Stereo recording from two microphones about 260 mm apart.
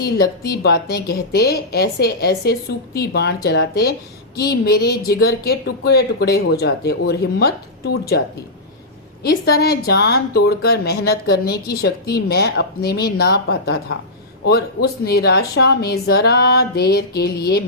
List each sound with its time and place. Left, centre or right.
0.0 s a woman's voice: left
9.2 s a woman's voice: left